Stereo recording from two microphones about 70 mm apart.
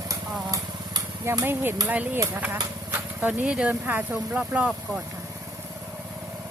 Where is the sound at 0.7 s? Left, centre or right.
Right.